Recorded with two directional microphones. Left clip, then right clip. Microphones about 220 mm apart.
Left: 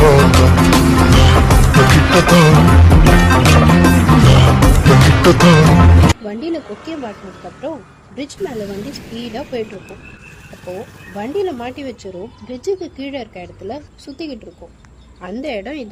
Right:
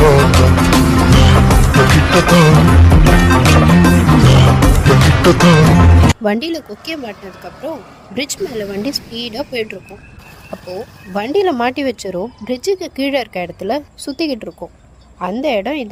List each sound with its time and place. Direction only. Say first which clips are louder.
0.0 s music: even; centre (ahead or behind)
6.2 s speech: right 5 dB; 35° right (ahead or behind)
11.1 s speech: right 6 dB; 35° right (ahead or behind)
15.2 s a woman's voice: right 8 dB; 25° right (ahead or behind)